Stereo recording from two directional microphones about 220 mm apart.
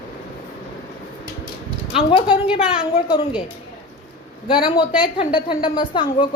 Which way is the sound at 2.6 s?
25° left (ahead or behind).